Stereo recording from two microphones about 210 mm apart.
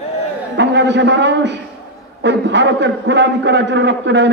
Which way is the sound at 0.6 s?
60° right (ahead or behind).